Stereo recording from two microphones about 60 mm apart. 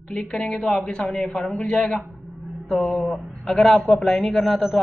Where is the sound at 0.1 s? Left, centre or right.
Centre.